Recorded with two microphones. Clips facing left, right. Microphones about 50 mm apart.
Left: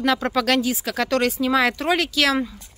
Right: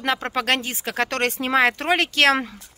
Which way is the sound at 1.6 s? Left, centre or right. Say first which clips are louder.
Right 3 dB; right.